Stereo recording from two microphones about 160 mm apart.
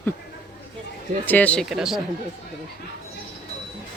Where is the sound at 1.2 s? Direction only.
10° left (ahead or behind).